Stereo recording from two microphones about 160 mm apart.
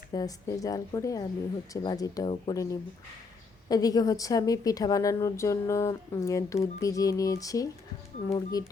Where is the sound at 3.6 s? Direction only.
25° left (ahead or behind).